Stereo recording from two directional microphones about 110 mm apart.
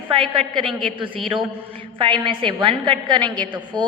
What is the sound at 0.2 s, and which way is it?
Speech, 5° left (ahead or behind).